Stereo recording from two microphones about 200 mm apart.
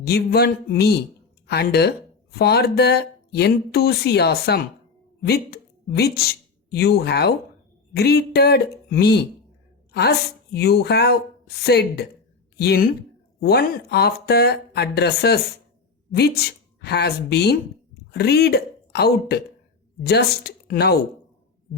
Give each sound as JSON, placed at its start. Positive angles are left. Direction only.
{"t": 0.0, "sound": "a woman's voice", "side_deg": 50}